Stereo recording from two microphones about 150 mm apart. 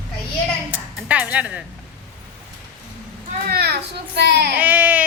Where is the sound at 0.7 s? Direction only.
10° right (ahead or behind).